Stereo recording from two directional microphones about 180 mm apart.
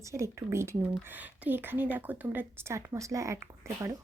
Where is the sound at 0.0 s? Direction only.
15° right (ahead or behind).